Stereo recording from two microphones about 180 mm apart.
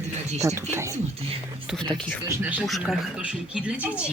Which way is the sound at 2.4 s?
10° right (ahead or behind).